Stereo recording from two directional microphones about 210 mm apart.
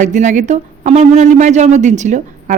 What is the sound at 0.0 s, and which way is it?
Speech, 35° right (ahead or behind).